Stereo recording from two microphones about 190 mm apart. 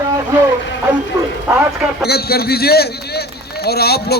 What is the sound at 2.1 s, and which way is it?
A man's voice, 55° left (ahead or behind).